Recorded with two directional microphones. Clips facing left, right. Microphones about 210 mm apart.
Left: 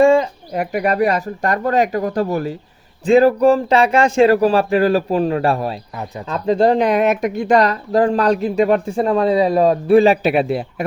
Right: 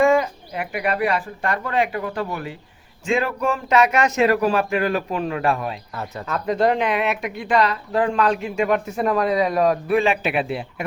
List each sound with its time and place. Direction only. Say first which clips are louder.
0.0 s bird: left 5 dB; 30° left (ahead or behind)
0.5 s speech: left 6 dB; 40° left (ahead or behind)